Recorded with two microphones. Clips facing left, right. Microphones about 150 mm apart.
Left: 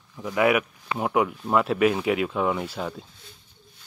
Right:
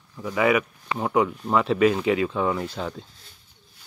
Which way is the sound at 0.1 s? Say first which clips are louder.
Even; 5° left (ahead or behind).